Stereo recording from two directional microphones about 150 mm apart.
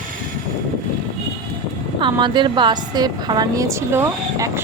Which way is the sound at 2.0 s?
30° right (ahead or behind).